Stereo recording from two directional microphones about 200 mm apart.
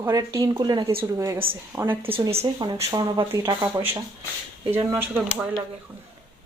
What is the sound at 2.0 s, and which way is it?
Speech, 25° right (ahead or behind).